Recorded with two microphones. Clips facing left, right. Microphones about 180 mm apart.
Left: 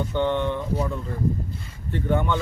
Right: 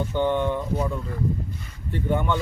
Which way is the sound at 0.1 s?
10° right (ahead or behind).